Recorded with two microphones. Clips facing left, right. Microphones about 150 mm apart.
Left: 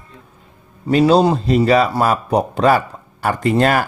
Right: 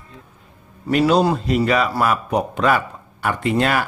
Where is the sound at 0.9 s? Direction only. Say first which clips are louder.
Left 3 dB; 30° left (ahead or behind).